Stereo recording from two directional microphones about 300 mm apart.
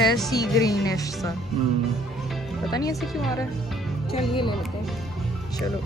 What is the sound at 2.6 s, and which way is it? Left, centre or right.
Speech, centre.